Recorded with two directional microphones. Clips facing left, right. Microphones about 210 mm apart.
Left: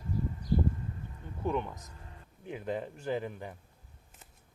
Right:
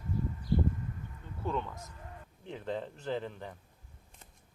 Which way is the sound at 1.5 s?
15° left (ahead or behind).